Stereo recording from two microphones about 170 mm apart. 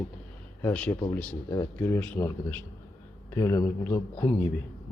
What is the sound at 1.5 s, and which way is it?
A man's voice, 20° left (ahead or behind).